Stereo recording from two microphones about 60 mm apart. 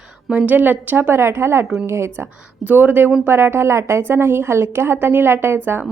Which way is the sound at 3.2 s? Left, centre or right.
Right.